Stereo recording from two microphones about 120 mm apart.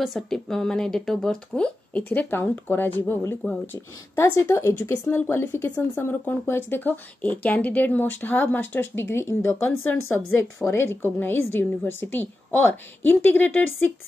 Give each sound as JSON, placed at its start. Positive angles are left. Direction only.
{"t": 0.0, "sound": "speech", "side_deg": 0}